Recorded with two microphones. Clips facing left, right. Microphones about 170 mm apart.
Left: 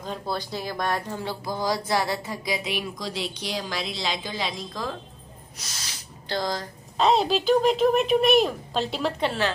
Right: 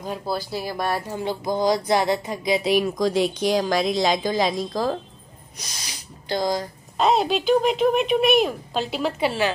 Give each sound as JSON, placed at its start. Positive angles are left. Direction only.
{"t": 0.0, "sound": "speech", "side_deg": -5}
{"t": 2.6, "sound": "speech", "side_deg": -45}
{"t": 5.6, "sound": "a woman's voice", "side_deg": -15}